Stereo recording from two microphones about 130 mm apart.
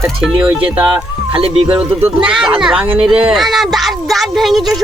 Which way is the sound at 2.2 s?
5° right (ahead or behind).